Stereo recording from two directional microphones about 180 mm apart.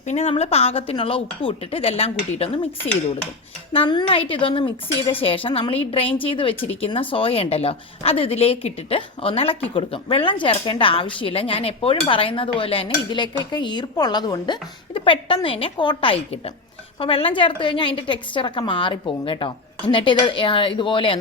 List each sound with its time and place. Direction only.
0.1 s a woman's voice: 35° left (ahead or behind)
3.7 s a woman's voice: 25° left (ahead or behind)